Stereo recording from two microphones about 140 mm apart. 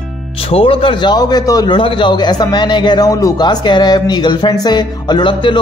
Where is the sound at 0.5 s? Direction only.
40° left (ahead or behind).